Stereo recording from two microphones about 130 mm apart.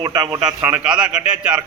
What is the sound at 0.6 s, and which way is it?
A man's voice, 10° right (ahead or behind).